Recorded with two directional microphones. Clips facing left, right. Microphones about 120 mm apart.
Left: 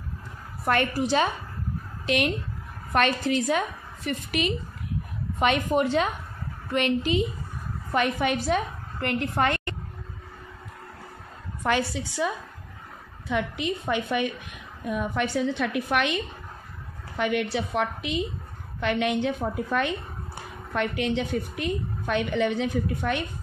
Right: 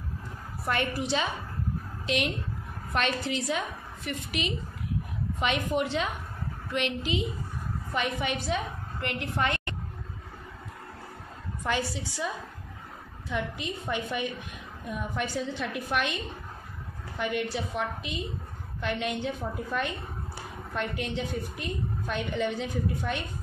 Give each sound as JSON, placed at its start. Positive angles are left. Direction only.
{"t": 0.9, "sound": "a woman's voice", "side_deg": 45}
{"t": 5.7, "sound": "a woman's voice", "side_deg": 45}
{"t": 11.6, "sound": "a woman's voice", "side_deg": 65}
{"t": 13.3, "sound": "a woman's voice", "side_deg": 75}
{"t": 17.2, "sound": "a woman's voice", "side_deg": 75}